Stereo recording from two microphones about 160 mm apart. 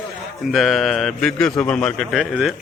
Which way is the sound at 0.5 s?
Centre (ahead or behind).